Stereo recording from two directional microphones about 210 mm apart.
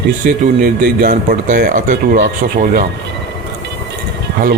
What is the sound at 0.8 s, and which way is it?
Speech, 45° right (ahead or behind).